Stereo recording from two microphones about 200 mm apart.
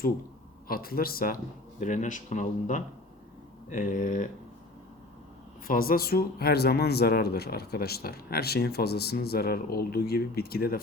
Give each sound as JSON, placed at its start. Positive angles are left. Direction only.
{"t": 0.7, "sound": "speech", "side_deg": 50}
{"t": 5.6, "sound": "speech", "side_deg": 45}